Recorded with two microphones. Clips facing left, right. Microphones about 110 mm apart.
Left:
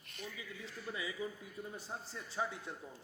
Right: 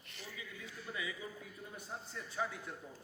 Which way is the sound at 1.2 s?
30° left (ahead or behind).